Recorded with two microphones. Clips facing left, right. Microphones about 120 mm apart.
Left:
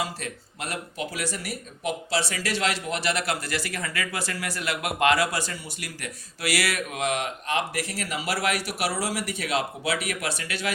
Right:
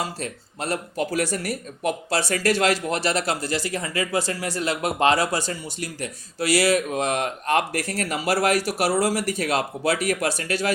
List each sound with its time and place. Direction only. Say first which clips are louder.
0.2 s speech: right 4 dB; 35° right (ahead or behind)